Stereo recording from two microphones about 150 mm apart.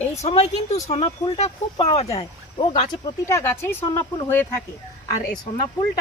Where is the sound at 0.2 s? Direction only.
45° left (ahead or behind).